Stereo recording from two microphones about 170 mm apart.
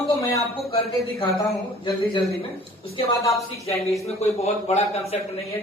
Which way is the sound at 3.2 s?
20° left (ahead or behind).